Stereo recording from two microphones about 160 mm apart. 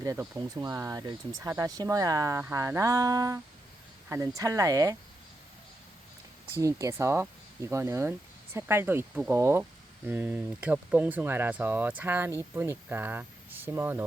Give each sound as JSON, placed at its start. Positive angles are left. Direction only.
{"t": 0.0, "sound": "speech", "side_deg": -20}
{"t": 6.5, "sound": "speech", "side_deg": -20}